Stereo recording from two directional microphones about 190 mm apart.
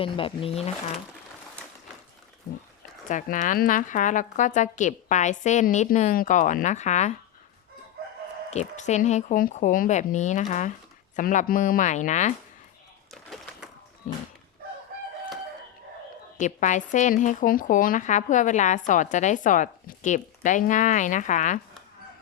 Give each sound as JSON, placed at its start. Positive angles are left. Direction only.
{"t": 0.0, "sound": "speech", "side_deg": 25}
{"t": 3.1, "sound": "speech", "side_deg": 40}
{"t": 8.4, "sound": "speech", "side_deg": 35}
{"t": 13.3, "sound": "a sound", "side_deg": 0}
{"t": 16.4, "sound": "speech", "side_deg": 40}